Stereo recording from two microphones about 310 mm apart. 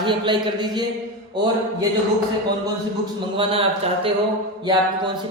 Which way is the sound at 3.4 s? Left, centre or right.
Centre.